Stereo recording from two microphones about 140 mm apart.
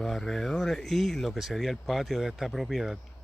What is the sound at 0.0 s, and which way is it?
Speech, centre (ahead or behind).